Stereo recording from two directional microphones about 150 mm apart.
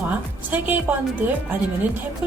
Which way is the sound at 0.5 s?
10° right (ahead or behind).